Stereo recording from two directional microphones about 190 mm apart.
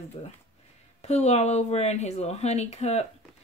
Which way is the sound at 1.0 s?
35° left (ahead or behind).